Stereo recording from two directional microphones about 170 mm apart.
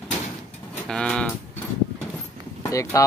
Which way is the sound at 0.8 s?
5° left (ahead or behind).